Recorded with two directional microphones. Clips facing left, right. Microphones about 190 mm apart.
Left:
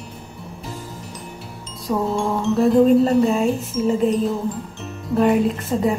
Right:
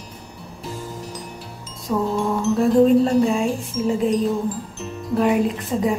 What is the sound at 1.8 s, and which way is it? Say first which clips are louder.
Music: even; centre (ahead or behind).